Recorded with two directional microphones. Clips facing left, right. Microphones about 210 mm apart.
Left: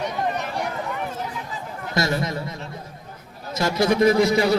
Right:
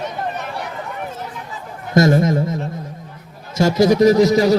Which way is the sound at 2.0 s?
50° right (ahead or behind).